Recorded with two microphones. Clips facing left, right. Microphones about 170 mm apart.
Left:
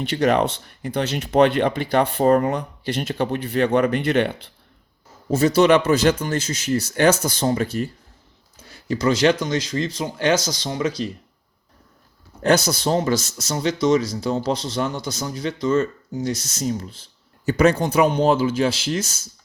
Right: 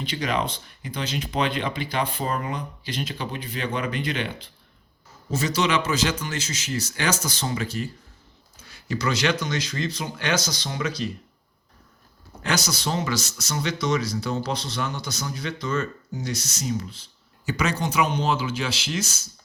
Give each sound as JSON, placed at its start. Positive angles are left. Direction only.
{"t": 0.2, "sound": "speech", "side_deg": 60}
{"t": 8.6, "sound": "speech", "side_deg": 45}
{"t": 10.7, "sound": "speech", "side_deg": 30}
{"t": 12.4, "sound": "speech", "side_deg": 55}
{"t": 14.3, "sound": "speech", "side_deg": 30}
{"t": 14.6, "sound": "speech", "side_deg": 45}
{"t": 15.2, "sound": "speech", "side_deg": 30}
{"t": 17.4, "sound": "speech", "side_deg": 55}